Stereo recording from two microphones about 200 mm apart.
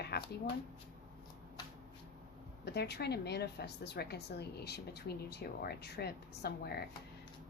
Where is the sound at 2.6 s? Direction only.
55° left (ahead or behind).